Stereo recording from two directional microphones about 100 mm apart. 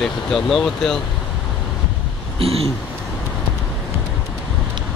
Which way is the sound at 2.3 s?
70° right (ahead or behind).